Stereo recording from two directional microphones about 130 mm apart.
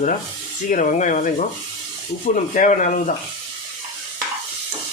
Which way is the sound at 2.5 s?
75° left (ahead or behind).